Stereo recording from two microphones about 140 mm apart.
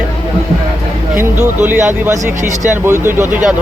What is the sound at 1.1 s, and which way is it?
Speech, 15° right (ahead or behind).